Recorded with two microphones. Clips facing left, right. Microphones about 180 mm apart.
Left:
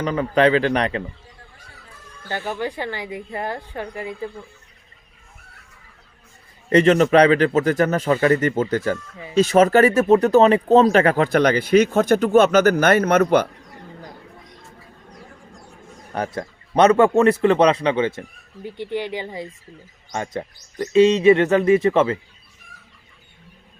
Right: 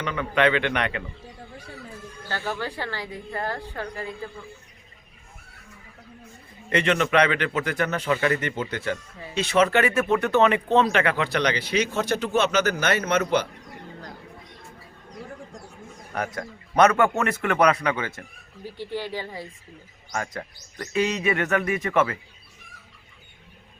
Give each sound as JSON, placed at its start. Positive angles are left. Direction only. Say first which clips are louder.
{"t": 0.0, "sound": "speech", "louder": "left 5 dB", "side_deg": 35}
{"t": 2.3, "sound": "speech", "louder": "left 4 dB", "side_deg": 15}
{"t": 6.7, "sound": "speech", "louder": "left 8 dB", "side_deg": 40}
{"t": 16.1, "sound": "speech", "louder": "left 4 dB", "side_deg": 30}